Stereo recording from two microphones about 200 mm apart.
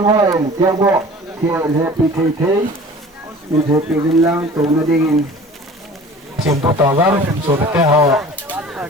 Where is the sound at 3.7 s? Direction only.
15° right (ahead or behind).